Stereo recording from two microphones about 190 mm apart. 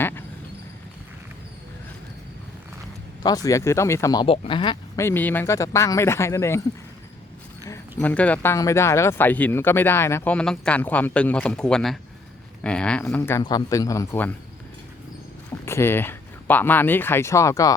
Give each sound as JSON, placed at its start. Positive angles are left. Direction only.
{"t": 3.2, "sound": "speech", "side_deg": 20}
{"t": 4.9, "sound": "speech", "side_deg": 10}
{"t": 7.7, "sound": "speech", "side_deg": 10}
{"t": 15.6, "sound": "speech", "side_deg": 15}